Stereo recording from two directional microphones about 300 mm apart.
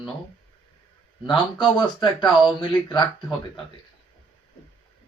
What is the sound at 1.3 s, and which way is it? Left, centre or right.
Speech, centre.